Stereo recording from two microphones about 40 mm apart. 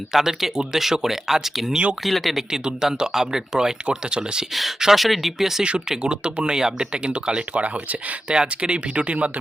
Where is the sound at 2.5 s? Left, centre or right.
Centre.